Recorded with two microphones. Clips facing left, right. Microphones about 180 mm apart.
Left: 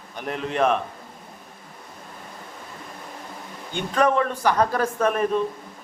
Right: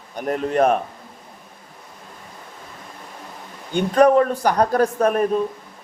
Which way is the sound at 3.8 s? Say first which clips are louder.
Right 7 dB; 40° right (ahead or behind).